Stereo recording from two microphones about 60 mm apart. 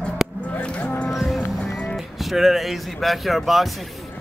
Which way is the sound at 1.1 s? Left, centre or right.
Centre.